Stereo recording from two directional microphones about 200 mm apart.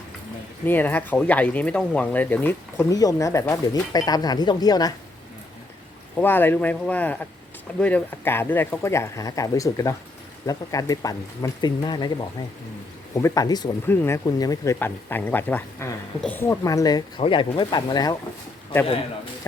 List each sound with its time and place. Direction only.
0.6 s speech: 10° left (ahead or behind)
6.1 s speech: 10° left (ahead or behind)
13.1 s speech: 15° left (ahead or behind)